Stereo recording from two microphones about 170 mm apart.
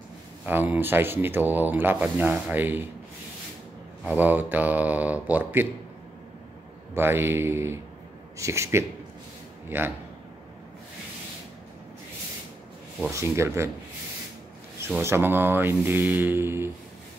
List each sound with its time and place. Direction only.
0.5 s speech: 10° right (ahead or behind)
4.0 s speech: 10° right (ahead or behind)
6.9 s speech: 15° right (ahead or behind)
13.1 s speech: 15° right (ahead or behind)
14.9 s speech: 15° right (ahead or behind)